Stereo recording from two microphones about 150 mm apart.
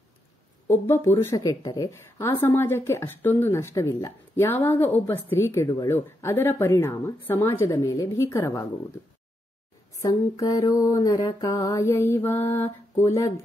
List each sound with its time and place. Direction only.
0.7 s a woman's voice: 15° left (ahead or behind)
9.9 s a woman's voice: 20° left (ahead or behind)